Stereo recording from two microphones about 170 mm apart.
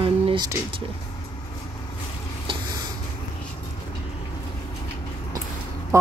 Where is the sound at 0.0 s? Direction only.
30° right (ahead or behind).